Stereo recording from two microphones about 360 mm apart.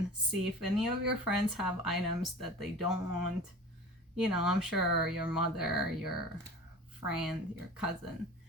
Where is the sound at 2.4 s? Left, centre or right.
Right.